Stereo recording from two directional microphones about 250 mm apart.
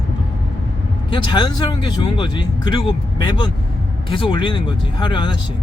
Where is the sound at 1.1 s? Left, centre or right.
Centre.